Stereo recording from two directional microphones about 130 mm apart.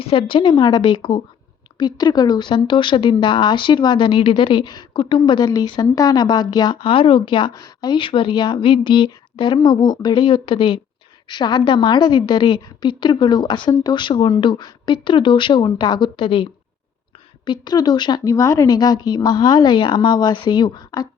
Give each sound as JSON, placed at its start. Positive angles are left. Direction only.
{"t": 0.0, "sound": "speech", "side_deg": 45}